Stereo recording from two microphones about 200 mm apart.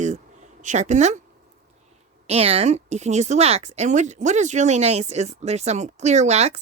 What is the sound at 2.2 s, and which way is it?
Speech, 30° right (ahead or behind).